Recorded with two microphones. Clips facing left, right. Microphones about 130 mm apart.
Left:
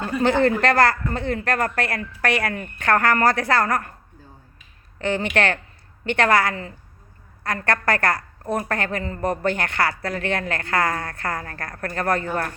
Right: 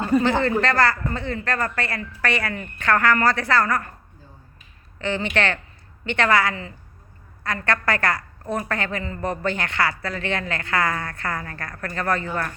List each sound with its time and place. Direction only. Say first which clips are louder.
0.2 s a woman's voice: left 2 dB; 55° left (ahead or behind)
4.9 s a woman's voice: left 2 dB; 50° left (ahead or behind)